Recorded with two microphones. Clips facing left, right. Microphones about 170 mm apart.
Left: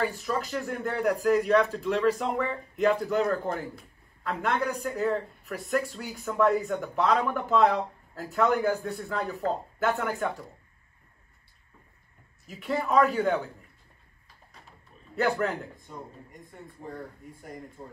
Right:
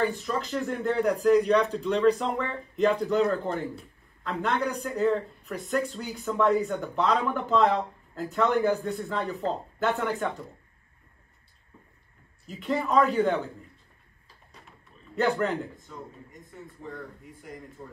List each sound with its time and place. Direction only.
0.2 s a man's voice: centre (ahead or behind)
12.4 s speech: centre (ahead or behind)
15.1 s speech: centre (ahead or behind)
16.8 s speech: 40° left (ahead or behind)
17.8 s speech: 20° left (ahead or behind)